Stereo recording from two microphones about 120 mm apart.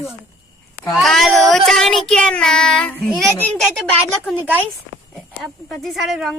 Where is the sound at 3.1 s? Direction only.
5° left (ahead or behind).